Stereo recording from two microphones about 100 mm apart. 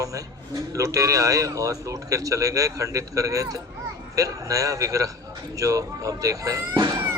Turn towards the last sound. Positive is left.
turn(degrees=-35)  # may be behind; listen again after turning